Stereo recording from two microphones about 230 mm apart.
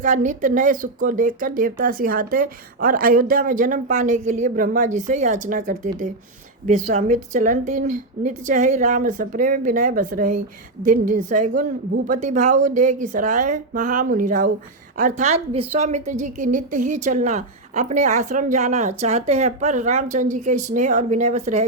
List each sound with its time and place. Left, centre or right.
0.0 s a woman's voice: right